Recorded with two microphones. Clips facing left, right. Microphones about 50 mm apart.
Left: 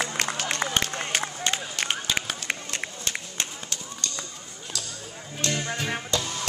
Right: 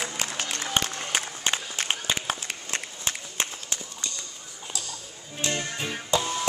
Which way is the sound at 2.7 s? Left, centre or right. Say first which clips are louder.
Left 1 dB; centre.